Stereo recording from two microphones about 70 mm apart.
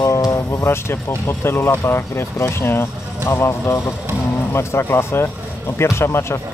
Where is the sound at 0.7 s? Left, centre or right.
Left.